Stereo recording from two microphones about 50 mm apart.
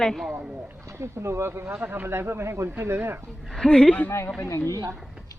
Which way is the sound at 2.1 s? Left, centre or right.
Right.